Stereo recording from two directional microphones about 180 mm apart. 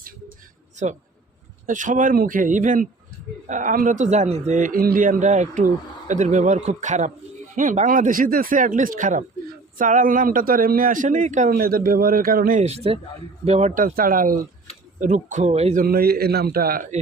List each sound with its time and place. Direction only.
0.8 s a man's voice: 40° right (ahead or behind)
11.5 s a man's voice: 55° right (ahead or behind); by 15.8 s 40° right (ahead or behind)
15.8 s a man's voice: 60° right (ahead or behind)